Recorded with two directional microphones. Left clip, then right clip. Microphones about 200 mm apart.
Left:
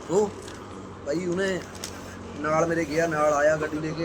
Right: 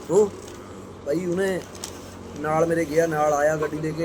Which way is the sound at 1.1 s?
20° right (ahead or behind).